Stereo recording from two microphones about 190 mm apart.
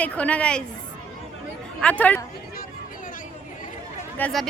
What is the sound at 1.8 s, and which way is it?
Speech, 10° left (ahead or behind).